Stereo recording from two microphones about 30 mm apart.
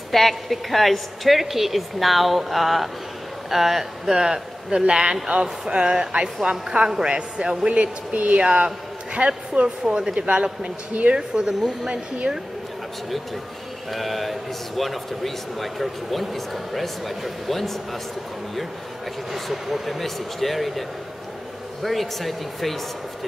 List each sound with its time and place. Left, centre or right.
0.1 s speech: centre
4.1 s speech: right
6.7 s a woman's voice: right
8.1 s speech: right
8.4 s a woman's voice: right
9.8 s speech: right
13.9 s speech: centre
19.3 s speech: centre
21.8 s speech: centre